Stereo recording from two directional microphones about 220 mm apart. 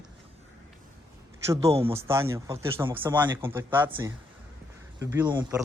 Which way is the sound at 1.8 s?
10° right (ahead or behind).